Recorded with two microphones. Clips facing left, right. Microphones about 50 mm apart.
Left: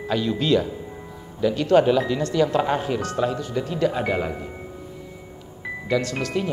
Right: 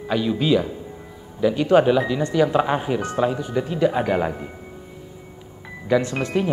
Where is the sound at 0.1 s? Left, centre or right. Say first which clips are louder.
Right 1 dB; centre.